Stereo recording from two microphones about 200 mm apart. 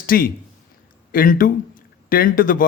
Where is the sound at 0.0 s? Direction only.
45° left (ahead or behind).